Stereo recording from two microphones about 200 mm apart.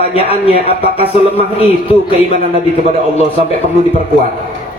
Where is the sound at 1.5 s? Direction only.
30° left (ahead or behind).